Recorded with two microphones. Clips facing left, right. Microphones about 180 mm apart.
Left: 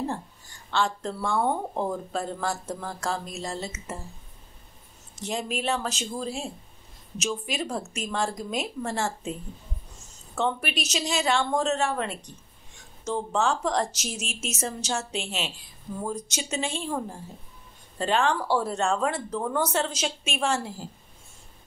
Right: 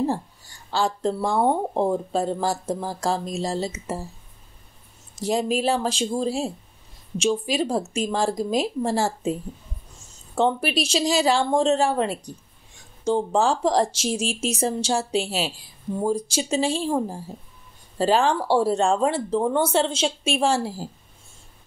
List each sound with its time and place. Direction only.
0.7 s speech: 35° right (ahead or behind)
5.2 s speech: 35° right (ahead or behind)